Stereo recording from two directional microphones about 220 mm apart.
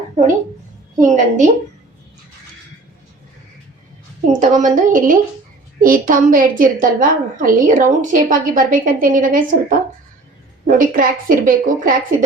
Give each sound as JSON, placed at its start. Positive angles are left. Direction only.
{"t": 0.9, "sound": "a woman's voice", "side_deg": -35}
{"t": 4.3, "sound": "a woman's voice", "side_deg": -35}